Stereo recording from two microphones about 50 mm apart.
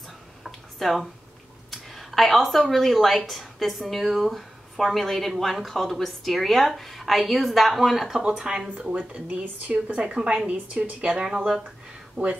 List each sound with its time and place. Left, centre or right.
0.4 s a sound: centre
1.7 s speech: centre
8.5 s a woman's voice: centre
10.0 s a woman's voice: centre
12.2 s speech: right